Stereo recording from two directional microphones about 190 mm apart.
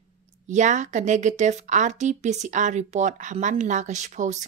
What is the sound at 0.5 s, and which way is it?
Speech, 40° right (ahead or behind).